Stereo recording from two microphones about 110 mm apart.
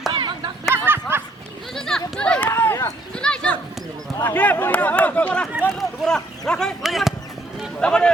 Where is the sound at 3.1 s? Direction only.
10° left (ahead or behind).